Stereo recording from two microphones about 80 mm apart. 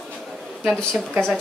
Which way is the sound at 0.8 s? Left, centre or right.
Centre.